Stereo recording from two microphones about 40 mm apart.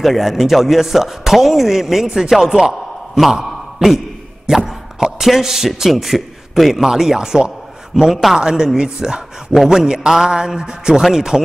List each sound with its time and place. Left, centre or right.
0.0 s a man's voice: centre
8.4 s speech: centre